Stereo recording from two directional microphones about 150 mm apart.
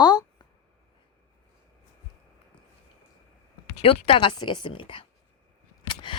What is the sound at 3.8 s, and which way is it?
A woman's voice, 40° left (ahead or behind).